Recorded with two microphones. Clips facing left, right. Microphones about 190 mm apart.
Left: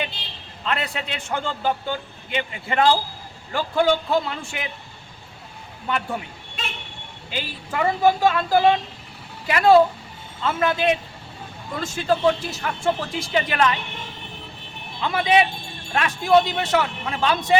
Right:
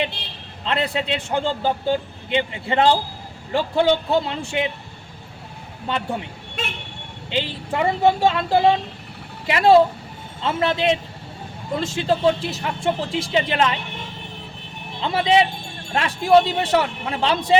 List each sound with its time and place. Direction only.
0.6 s a man's voice: 25° right (ahead or behind)
5.9 s a man's voice: 30° right (ahead or behind)
7.3 s a man's voice: 25° right (ahead or behind)
15.0 s a man's voice: 25° right (ahead or behind)